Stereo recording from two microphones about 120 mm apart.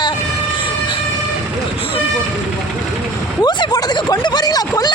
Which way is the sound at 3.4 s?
35° left (ahead or behind).